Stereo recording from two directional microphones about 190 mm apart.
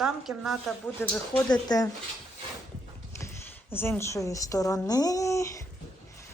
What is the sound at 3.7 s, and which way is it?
A woman's voice, 10° left (ahead or behind).